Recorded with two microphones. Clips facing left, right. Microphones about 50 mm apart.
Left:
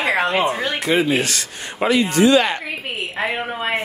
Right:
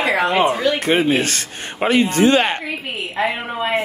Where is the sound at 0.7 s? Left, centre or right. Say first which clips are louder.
Right 1 dB; right.